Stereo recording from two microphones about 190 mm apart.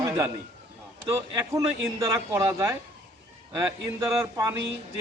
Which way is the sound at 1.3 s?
15° right (ahead or behind).